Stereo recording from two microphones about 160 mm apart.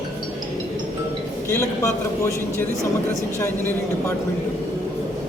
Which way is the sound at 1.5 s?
20° left (ahead or behind).